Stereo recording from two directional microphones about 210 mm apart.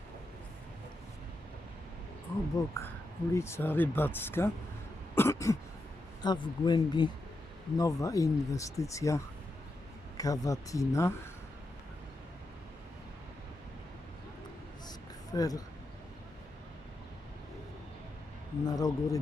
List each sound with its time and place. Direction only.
2.6 s speech: 15° left (ahead or behind)
14.8 s a sound: 15° left (ahead or behind)
18.6 s speech: 15° left (ahead or behind)